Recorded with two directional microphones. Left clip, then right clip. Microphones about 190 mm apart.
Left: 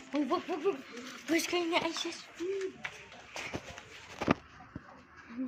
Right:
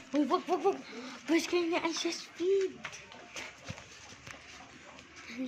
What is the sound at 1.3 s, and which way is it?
Speech, 40° right (ahead or behind).